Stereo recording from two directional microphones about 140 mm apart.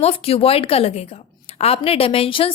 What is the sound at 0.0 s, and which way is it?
A woman's voice, 45° left (ahead or behind).